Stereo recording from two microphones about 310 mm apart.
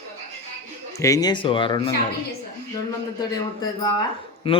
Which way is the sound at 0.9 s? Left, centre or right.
Centre.